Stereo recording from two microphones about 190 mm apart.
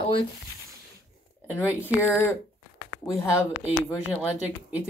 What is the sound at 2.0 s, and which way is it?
Speech, 10° left (ahead or behind).